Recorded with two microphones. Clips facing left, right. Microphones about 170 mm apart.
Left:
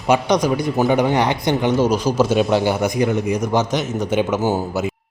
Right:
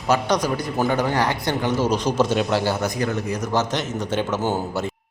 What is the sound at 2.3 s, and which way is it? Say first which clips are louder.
A man's voice: left 4 dB; 15° left (ahead or behind).